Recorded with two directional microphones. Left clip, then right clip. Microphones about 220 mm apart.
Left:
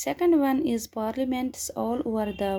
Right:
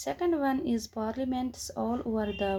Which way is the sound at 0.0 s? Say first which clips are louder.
Left 6 dB; 35° left (ahead or behind).